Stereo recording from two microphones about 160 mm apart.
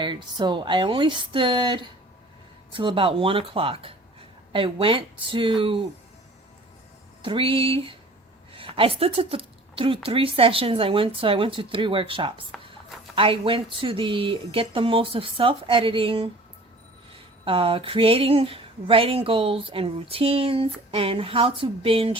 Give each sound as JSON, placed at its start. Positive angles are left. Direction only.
{"t": 0.0, "sound": "speech", "side_deg": -30}
{"t": 7.2, "sound": "speech", "side_deg": -35}
{"t": 17.4, "sound": "speech", "side_deg": -35}